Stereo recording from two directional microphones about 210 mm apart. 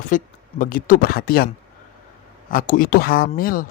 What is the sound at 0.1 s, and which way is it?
A man's voice, 40° left (ahead or behind).